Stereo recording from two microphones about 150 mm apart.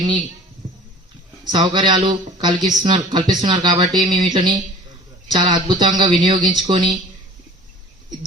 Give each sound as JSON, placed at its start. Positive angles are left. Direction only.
{"t": 1.5, "sound": "speech", "side_deg": -30}